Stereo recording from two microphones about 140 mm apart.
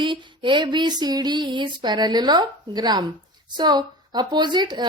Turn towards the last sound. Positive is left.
turn(degrees=-30)  # may be behind; listen again after turning